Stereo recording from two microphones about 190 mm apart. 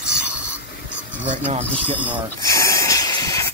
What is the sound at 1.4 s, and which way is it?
Speech, 30° right (ahead or behind).